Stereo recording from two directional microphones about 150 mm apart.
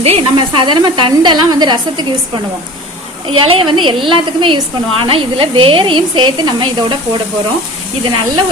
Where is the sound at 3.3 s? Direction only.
35° right (ahead or behind).